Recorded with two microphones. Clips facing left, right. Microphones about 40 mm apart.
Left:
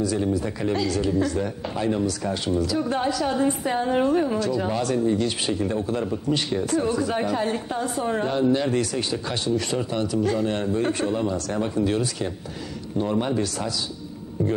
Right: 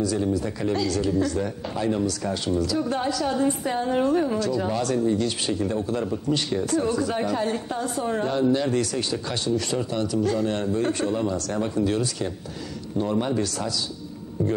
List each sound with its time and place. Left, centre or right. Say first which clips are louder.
0.0 s speech: even; centre